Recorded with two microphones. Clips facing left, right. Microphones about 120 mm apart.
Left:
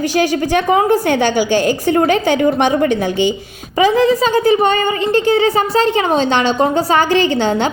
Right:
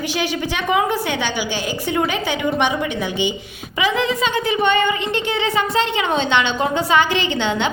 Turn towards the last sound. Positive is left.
turn(degrees=40)  # may be behind; listen again after turning